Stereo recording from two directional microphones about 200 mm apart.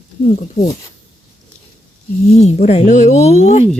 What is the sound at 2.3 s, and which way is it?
Speech, 30° left (ahead or behind).